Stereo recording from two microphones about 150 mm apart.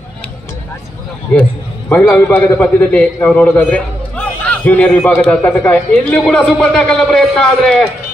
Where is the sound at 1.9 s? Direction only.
10° left (ahead or behind).